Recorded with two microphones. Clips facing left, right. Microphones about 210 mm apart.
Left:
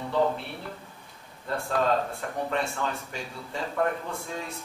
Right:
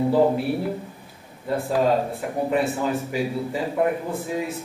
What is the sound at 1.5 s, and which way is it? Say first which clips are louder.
Speech: right 5 dB; 10° right (ahead or behind).